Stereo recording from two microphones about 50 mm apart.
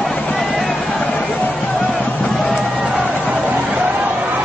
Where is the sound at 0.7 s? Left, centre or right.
Left.